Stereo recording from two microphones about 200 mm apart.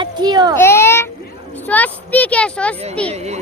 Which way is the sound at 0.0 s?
20° right (ahead or behind).